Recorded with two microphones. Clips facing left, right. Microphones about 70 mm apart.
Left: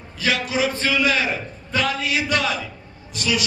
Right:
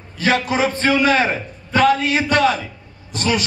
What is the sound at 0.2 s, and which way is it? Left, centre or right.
A man's voice, right.